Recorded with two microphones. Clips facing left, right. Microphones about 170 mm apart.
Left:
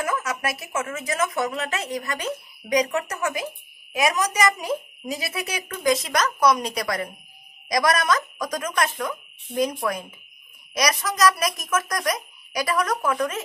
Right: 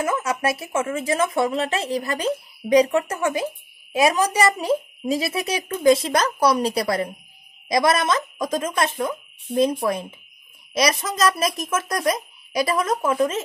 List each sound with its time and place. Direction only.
0.0 s a woman's voice: 25° right (ahead or behind)